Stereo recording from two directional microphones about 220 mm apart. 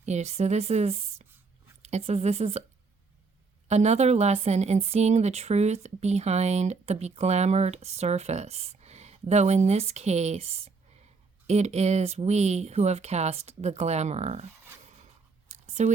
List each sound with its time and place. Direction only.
0.0 s speech: 30° right (ahead or behind)
3.7 s speech: 30° right (ahead or behind)
15.4 s a sound: 30° right (ahead or behind)